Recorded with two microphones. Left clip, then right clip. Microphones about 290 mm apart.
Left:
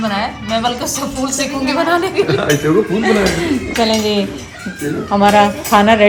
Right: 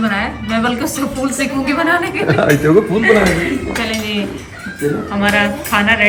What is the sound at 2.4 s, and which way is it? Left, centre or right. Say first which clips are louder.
Speech: right 3 dB; right.